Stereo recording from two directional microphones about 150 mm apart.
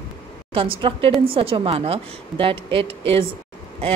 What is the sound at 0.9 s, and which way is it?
A woman's voice, 45° right (ahead or behind).